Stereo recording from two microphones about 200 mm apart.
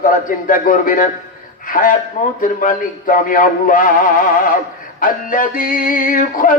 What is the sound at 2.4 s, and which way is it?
Music, 45° left (ahead or behind).